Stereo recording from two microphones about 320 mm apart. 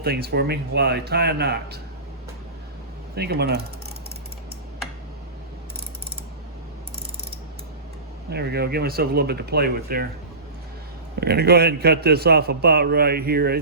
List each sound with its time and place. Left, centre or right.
0.0 s speech: right
3.2 s a man's voice: right
8.3 s a man's voice: right
11.2 s a man's voice: right